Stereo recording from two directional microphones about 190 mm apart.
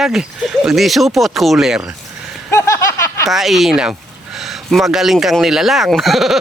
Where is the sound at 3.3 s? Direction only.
Centre (ahead or behind).